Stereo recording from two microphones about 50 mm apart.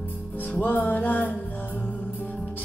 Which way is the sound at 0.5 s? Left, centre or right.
Left.